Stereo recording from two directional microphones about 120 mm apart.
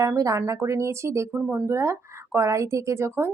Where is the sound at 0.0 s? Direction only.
25° right (ahead or behind).